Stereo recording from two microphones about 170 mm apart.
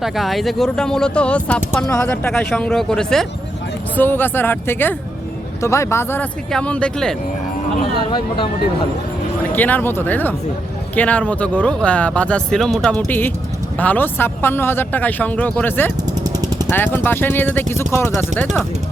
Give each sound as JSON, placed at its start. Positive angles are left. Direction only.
{"t": 0.0, "sound": "speech", "side_deg": 0}
{"t": 9.6, "sound": "speech", "side_deg": 10}